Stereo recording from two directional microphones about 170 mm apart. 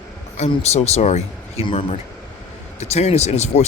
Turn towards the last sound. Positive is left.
turn(degrees=40)  # may be behind; listen again after turning